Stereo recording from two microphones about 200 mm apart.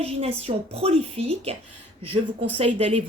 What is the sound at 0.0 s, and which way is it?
A woman's voice, 30° right (ahead or behind).